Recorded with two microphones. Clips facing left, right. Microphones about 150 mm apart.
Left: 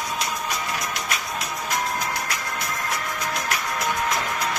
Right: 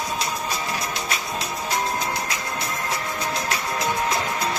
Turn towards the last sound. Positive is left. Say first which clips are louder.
# right 1 dB
turn(degrees=-30)  # may be behind; listen again after turning